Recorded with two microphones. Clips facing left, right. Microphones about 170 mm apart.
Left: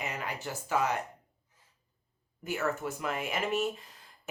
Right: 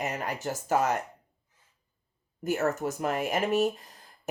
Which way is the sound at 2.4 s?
45° right (ahead or behind).